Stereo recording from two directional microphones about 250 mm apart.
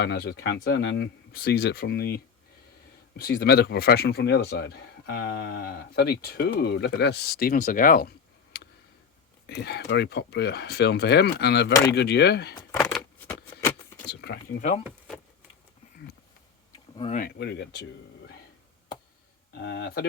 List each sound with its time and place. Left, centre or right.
0.0 s speech: left
8.5 s tick: left
9.6 s speech: left
12.5 s a sound: centre
13.6 s keys jangling: centre
14.1 s speech: left
14.6 s speech: left
14.8 s a sound: centre
16.9 s speech: left
19.5 s speech: left